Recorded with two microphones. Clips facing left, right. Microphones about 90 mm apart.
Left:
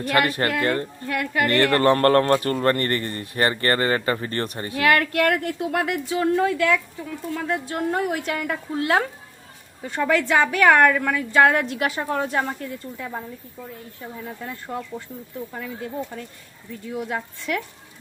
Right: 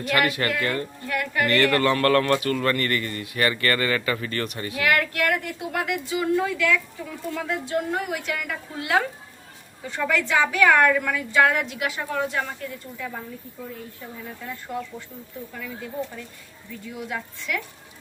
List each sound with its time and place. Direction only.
0.0 s speech: 35° left (ahead or behind)
17.1 s speech: 40° left (ahead or behind)